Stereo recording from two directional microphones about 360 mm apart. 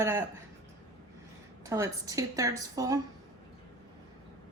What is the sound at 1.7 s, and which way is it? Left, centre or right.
A woman's voice, centre.